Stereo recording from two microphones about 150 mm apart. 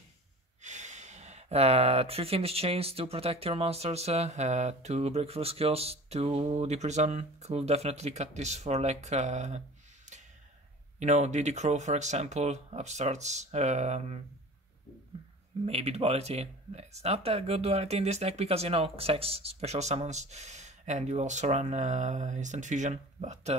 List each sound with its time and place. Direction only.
0.6 s speech: 50° right (ahead or behind)
11.0 s speech: 50° right (ahead or behind)
15.6 s speech: 40° right (ahead or behind)